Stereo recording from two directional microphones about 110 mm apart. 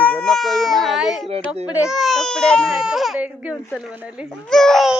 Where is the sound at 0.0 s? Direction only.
10° left (ahead or behind).